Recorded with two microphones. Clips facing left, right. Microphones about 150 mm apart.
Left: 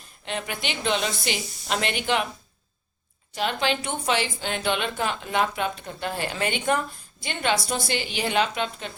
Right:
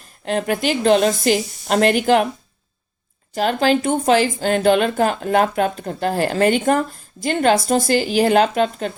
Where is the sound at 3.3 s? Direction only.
40° right (ahead or behind).